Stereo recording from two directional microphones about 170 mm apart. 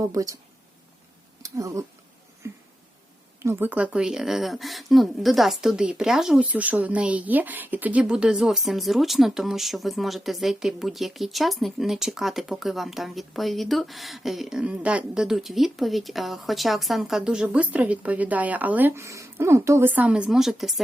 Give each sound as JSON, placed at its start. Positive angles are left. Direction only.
{"t": 0.0, "sound": "speech", "side_deg": -20}
{"t": 1.4, "sound": "a sound", "side_deg": -20}
{"t": 3.4, "sound": "speech", "side_deg": -15}